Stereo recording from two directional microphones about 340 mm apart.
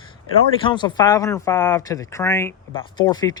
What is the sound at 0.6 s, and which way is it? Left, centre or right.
Speech, centre.